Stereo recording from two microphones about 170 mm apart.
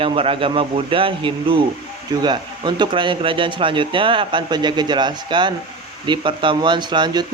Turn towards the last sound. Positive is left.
turn(degrees=-25)  # may be behind; listen again after turning